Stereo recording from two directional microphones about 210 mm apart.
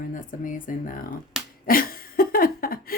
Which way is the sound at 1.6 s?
45° left (ahead or behind).